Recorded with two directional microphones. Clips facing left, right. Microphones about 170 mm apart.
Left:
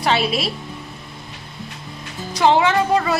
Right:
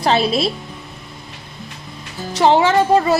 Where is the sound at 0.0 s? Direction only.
35° right (ahead or behind).